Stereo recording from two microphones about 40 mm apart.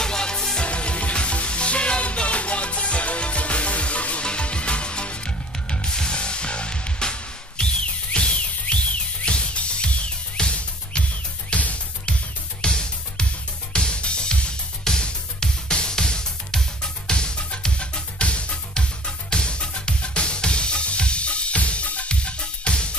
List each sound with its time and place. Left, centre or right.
0.0 s music: centre
0.7 s music: left
12.7 s music: left